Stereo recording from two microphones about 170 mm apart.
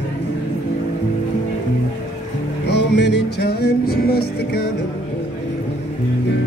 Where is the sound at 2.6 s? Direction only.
85° left; by 4.7 s 70° left (ahead or behind).